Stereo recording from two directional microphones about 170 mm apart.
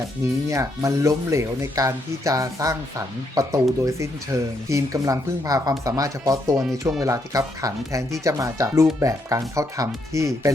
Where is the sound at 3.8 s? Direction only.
20° right (ahead or behind).